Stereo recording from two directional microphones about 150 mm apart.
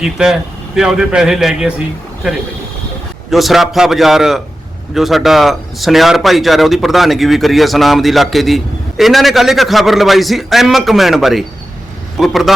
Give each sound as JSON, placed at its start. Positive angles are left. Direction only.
{"t": 0.0, "sound": "speech", "side_deg": -5}
{"t": 3.2, "sound": "speech", "side_deg": 0}